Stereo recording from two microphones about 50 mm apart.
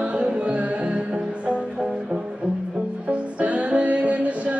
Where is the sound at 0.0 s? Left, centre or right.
Right.